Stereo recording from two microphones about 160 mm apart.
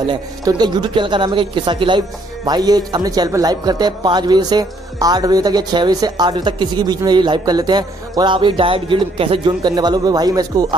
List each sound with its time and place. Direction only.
0.0 s speech: 25° right (ahead or behind)